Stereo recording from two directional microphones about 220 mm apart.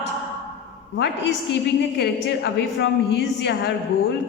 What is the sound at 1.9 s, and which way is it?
A woman's voice, 50° left (ahead or behind).